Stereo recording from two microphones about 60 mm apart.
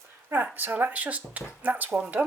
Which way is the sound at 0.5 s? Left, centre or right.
Right.